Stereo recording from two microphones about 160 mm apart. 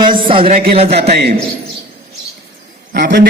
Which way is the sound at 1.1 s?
90° right.